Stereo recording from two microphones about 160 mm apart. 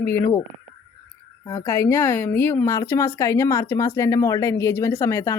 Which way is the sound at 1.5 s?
20° left (ahead or behind).